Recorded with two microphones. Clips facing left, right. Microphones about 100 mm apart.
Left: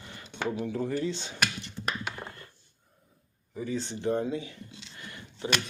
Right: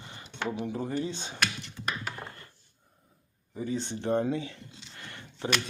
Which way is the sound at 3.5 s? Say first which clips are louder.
Even; 35° right (ahead or behind).